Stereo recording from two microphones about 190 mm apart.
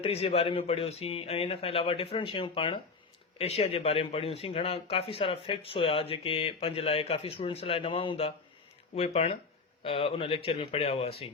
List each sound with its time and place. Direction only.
0.0 s speech: 30° left (ahead or behind)